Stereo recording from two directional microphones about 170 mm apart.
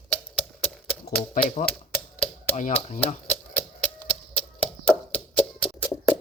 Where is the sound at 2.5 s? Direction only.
40° left (ahead or behind).